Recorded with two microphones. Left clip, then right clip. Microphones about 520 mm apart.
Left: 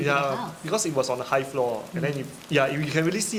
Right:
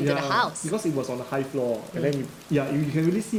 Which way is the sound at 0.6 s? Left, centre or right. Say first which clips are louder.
Left 2 dB; left.